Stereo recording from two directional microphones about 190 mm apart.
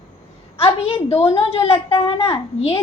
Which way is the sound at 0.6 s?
30° left (ahead or behind).